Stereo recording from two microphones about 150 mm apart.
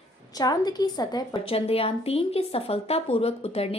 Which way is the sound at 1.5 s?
40° left (ahead or behind).